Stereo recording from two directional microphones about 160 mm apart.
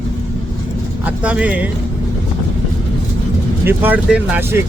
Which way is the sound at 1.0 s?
10° right (ahead or behind).